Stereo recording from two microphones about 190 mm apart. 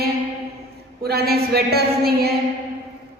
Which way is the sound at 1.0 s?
55° right (ahead or behind).